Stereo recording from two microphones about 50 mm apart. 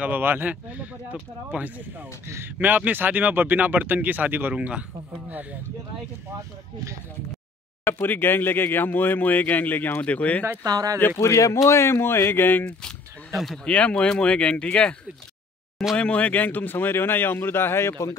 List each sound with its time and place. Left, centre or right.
0.0 s speech: right
0.5 s speech: right
2.2 s speech: right
2.6 s speech: right
4.6 s speech: right
6.3 s speech: right
7.8 s speech: left
10.0 s speech: left
11.1 s speech: left
13.3 s speech: centre
13.7 s speech: left
16.0 s speech: left